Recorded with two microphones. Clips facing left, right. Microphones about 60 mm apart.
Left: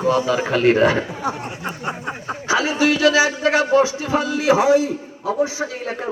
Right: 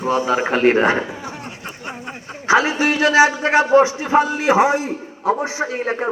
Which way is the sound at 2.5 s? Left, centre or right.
Right.